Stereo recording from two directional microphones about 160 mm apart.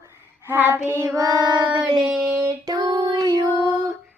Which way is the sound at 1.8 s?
5° right (ahead or behind).